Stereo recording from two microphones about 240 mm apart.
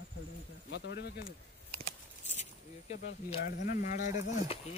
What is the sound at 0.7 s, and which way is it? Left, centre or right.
Speech, left.